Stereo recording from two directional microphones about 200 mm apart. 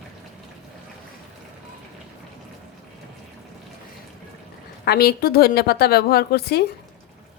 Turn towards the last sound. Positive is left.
turn(degrees=50)  # may be behind; listen again after turning